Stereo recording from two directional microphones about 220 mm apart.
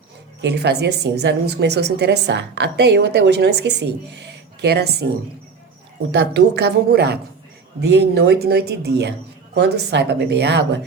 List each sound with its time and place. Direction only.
0.4 s a woman's voice: 50° right (ahead or behind)
6.1 s a woman's voice: 50° right (ahead or behind)